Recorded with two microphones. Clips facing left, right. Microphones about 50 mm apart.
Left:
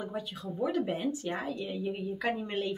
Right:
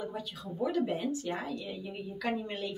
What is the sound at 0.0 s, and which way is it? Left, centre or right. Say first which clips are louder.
A woman's voice: left 2 dB; centre.